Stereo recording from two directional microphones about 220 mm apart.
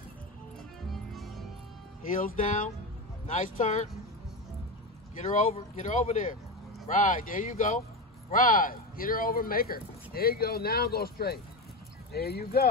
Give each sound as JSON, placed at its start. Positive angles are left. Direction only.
{"t": 1.1, "sound": "music", "side_deg": 0}
{"t": 2.0, "sound": "speech", "side_deg": 40}
{"t": 5.1, "sound": "speech", "side_deg": 35}